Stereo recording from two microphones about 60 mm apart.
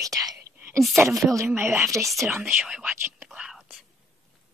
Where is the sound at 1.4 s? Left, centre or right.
Right.